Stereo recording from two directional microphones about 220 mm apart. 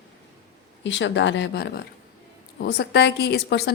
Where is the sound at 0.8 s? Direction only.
55° left (ahead or behind).